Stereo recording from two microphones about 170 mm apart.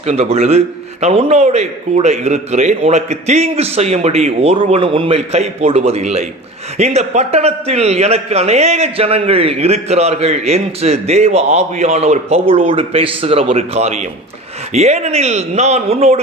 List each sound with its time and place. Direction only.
0.0 s a man's voice: 40° right (ahead or behind)